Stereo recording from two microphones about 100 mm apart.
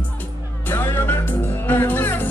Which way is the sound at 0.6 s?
20° left (ahead or behind).